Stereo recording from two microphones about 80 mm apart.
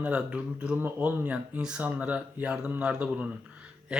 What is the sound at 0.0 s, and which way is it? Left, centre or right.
Speech, centre.